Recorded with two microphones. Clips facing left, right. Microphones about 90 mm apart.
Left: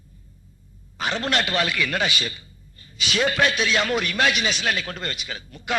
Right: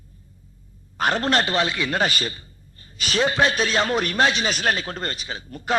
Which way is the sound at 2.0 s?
40° right (ahead or behind).